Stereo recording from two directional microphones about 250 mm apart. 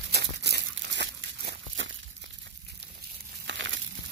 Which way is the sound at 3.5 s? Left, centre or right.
Right.